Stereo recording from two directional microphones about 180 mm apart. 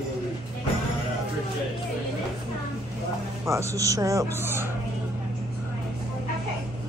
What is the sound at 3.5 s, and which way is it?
Speech, 15° right (ahead or behind).